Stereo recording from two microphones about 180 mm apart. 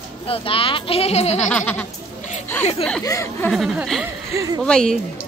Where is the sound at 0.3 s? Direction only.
30° left (ahead or behind).